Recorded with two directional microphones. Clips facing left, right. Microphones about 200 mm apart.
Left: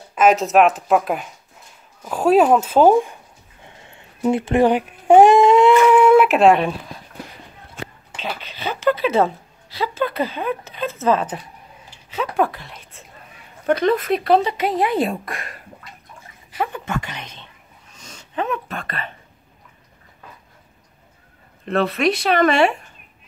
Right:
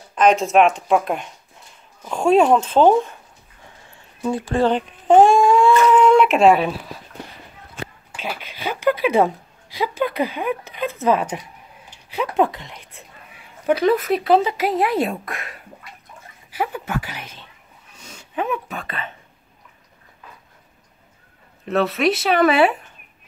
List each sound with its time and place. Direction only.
0.1 s speech: 5° left (ahead or behind)
3.6 s baby cry: 20° left (ahead or behind); by 6.7 s centre (ahead or behind)
8.2 s a woman's voice: 10° right (ahead or behind)
13.7 s a woman's voice: 5° right (ahead or behind)
21.6 s speech: centre (ahead or behind)